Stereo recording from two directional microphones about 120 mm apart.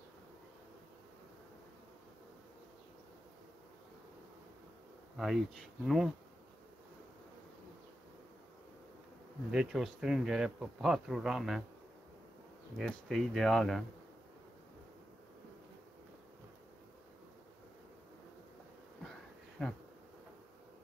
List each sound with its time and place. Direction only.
5.1 s speech: centre (ahead or behind)
9.5 s speech: 5° right (ahead or behind)
12.7 s speech: 5° left (ahead or behind)
19.6 s speech: 5° left (ahead or behind)